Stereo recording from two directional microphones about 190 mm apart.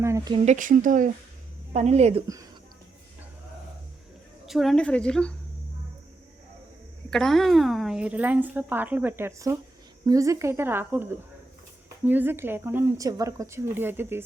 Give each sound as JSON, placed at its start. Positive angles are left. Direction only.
{"t": 0.0, "sound": "speech", "side_deg": -15}
{"t": 0.3, "sound": "a woman's voice", "side_deg": -40}
{"t": 4.4, "sound": "a woman's voice", "side_deg": 0}
{"t": 7.1, "sound": "speech", "side_deg": 0}